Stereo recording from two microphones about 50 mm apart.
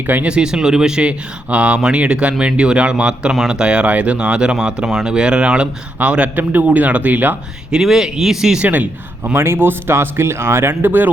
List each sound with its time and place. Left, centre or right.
0.3 s speech: centre; by 7.3 s right
7.7 s speech: centre
8.5 s speech: right
9.3 s speech: right